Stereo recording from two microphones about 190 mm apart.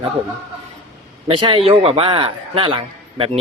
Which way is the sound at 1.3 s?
30° right (ahead or behind).